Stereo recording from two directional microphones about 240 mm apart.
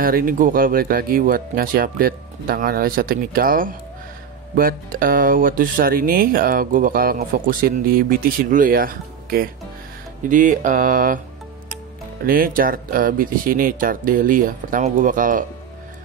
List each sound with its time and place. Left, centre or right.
0.0 s speech: right
12.3 s speech: right